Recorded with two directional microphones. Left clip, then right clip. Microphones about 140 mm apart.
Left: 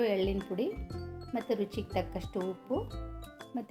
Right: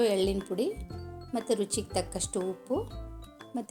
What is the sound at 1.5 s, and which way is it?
Speech, 35° right (ahead or behind).